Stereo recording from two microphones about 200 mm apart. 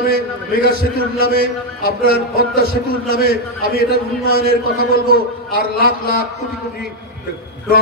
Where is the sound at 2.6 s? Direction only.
50° left (ahead or behind).